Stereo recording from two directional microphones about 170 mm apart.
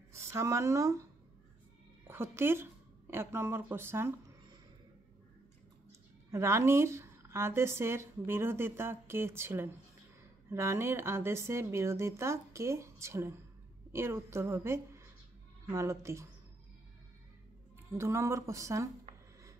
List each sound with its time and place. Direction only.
0.1 s speech: 15° right (ahead or behind)
2.0 s a woman's voice: 15° right (ahead or behind)
5.9 s a woman's voice: 15° right (ahead or behind)
17.9 s a woman's voice: 15° right (ahead or behind)